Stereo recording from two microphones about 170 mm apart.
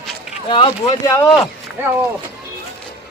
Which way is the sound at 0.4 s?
25° left (ahead or behind).